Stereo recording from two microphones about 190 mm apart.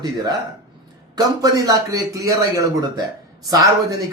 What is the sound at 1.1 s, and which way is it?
A man's voice, 20° right (ahead or behind).